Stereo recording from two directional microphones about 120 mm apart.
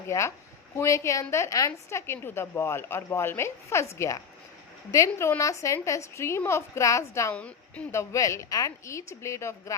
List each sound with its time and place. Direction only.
0.1 s a woman's voice: 25° left (ahead or behind)
7.3 s a woman's voice: 10° left (ahead or behind)
7.9 s a woman's voice: 25° left (ahead or behind)